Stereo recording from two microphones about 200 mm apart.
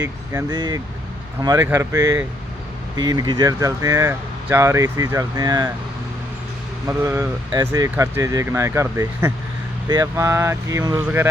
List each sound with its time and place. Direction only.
0.0 s speech: 15° right (ahead or behind)
6.8 s speech: 15° right (ahead or behind)